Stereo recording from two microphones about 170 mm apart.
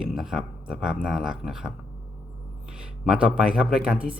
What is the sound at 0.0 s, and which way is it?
A man's voice, centre (ahead or behind).